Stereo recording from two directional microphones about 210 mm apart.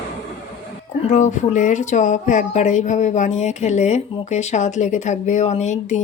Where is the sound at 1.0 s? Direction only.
35° left (ahead or behind).